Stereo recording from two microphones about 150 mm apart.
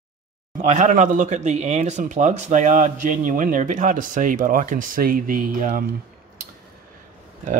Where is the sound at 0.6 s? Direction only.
55° right (ahead or behind).